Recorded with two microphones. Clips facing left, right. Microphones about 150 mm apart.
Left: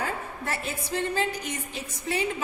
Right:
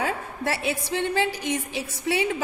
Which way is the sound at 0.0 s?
90° right.